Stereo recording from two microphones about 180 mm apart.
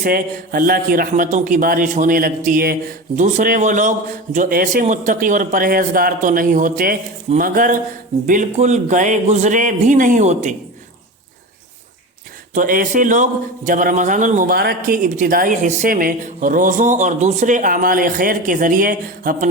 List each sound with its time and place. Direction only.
0.0 s a man's voice: 50° right (ahead or behind)
12.5 s a man's voice: 50° right (ahead or behind)